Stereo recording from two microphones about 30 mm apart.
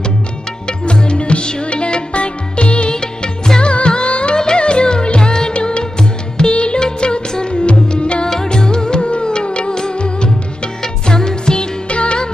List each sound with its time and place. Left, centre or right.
0.7 s music: left
2.9 s music: left
3.6 s music: left
8.3 s music: centre
10.8 s music: left
11.9 s music: left